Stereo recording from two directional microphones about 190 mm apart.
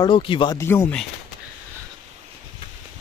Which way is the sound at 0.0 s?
25° left (ahead or behind).